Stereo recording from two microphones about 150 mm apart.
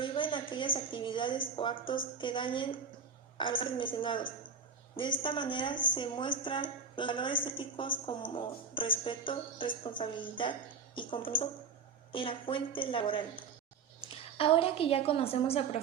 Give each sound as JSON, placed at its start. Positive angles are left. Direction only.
{"t": 0.0, "sound": "a woman's voice", "side_deg": 35}